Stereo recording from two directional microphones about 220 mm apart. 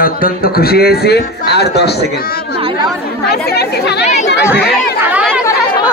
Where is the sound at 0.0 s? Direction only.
40° left (ahead or behind).